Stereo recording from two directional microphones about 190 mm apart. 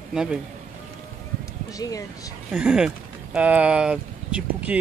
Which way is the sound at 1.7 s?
20° left (ahead or behind).